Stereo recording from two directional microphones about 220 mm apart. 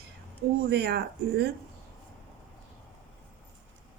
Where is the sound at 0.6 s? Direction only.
45° right (ahead or behind).